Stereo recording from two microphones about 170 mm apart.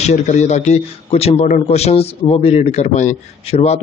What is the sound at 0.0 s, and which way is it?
A man's voice, 40° left (ahead or behind).